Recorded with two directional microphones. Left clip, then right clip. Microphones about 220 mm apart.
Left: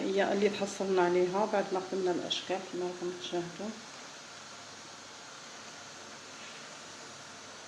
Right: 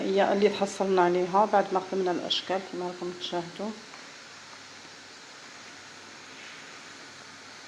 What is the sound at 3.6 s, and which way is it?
Speech, 30° right (ahead or behind).